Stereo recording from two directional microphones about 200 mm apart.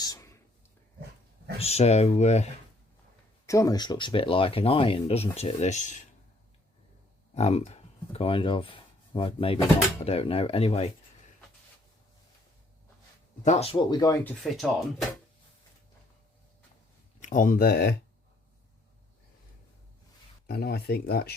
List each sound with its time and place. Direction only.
0.0 s a sound: 15° left (ahead or behind)
1.5 s speech: 30° left (ahead or behind)
3.4 s speech: 15° left (ahead or behind); by 6.0 s 35° left (ahead or behind)
7.3 s speech: 30° left (ahead or behind)
13.4 s speech: 35° left (ahead or behind); by 14.3 s 15° left (ahead or behind)
14.4 s speech: centre (ahead or behind)
17.2 s speech: 40° left (ahead or behind)
20.5 s speech: 55° left (ahead or behind)